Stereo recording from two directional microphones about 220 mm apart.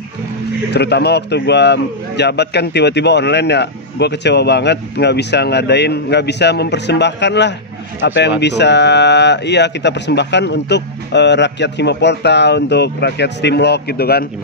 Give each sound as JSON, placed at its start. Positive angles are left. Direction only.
{"t": 0.7, "sound": "a man's voice", "side_deg": 50}